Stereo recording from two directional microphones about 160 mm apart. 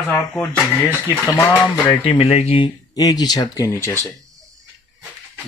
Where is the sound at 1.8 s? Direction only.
30° left (ahead or behind).